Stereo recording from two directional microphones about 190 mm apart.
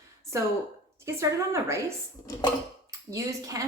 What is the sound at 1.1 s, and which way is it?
A woman's voice, 15° right (ahead or behind).